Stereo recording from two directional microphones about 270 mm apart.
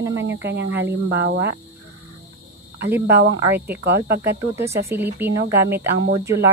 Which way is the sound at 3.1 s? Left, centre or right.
Right.